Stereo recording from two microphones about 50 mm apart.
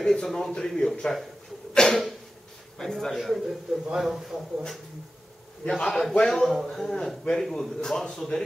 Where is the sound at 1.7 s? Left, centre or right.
Centre.